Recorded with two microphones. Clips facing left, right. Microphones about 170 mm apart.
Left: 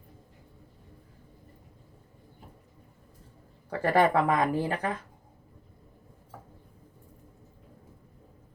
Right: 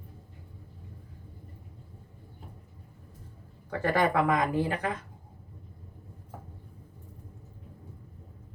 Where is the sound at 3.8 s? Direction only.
35° left (ahead or behind).